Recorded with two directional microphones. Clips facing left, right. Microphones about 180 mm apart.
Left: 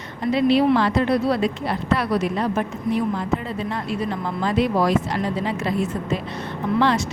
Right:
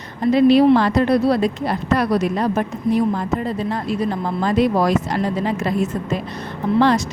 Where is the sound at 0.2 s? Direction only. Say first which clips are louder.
Right 5 dB; 40° right (ahead or behind).